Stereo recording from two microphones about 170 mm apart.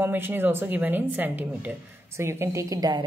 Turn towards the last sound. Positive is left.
turn(degrees=-20)  # may be behind; listen again after turning